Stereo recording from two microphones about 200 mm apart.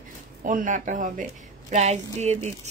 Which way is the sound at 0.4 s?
40° right (ahead or behind).